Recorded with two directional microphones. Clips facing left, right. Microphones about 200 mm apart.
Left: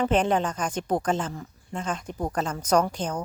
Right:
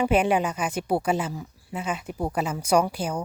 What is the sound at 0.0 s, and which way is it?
Speech, 10° right (ahead or behind).